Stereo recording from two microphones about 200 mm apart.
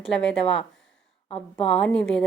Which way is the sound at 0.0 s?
5° left (ahead or behind).